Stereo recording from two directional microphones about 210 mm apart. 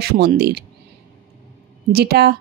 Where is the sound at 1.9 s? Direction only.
50° right (ahead or behind).